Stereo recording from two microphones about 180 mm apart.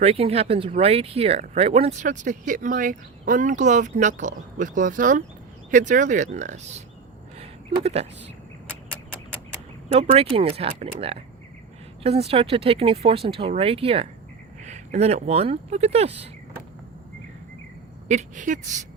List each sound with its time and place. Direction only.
0.0 s speech: 35° right (ahead or behind)
9.9 s speech: 35° right (ahead or behind)
18.1 s speech: 40° right (ahead or behind)